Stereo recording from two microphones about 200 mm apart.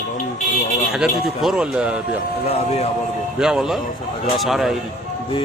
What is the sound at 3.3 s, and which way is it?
Speech, 5° right (ahead or behind).